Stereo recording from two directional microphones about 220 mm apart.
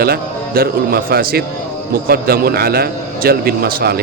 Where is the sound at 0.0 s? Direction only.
45° right (ahead or behind).